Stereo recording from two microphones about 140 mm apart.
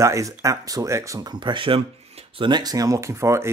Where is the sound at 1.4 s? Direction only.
35° right (ahead or behind).